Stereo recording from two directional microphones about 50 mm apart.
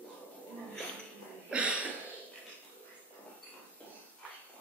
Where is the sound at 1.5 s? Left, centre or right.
Right.